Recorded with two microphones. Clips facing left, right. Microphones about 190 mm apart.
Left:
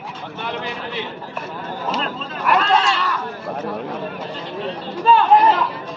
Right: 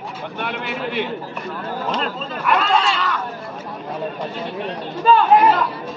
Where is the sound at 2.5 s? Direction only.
Centre (ahead or behind).